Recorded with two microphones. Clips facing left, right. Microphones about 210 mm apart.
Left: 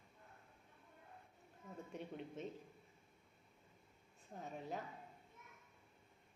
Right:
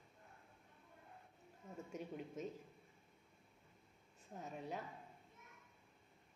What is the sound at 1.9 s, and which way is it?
Speech, 5° right (ahead or behind).